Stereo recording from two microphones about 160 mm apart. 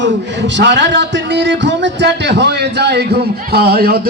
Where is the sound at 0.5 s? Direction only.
90° right.